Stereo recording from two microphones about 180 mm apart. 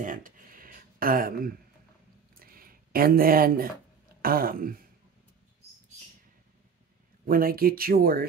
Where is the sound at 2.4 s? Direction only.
55° right (ahead or behind).